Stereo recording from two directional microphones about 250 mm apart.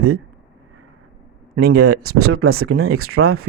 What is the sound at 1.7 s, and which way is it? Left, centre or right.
Speech, right.